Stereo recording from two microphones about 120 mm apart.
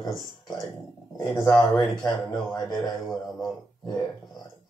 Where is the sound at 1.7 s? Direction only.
30° left (ahead or behind).